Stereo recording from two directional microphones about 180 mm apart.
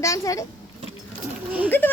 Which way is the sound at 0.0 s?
15° left (ahead or behind).